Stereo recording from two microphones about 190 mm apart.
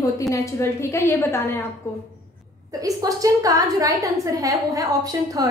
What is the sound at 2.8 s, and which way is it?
A woman's voice, 20° right (ahead or behind).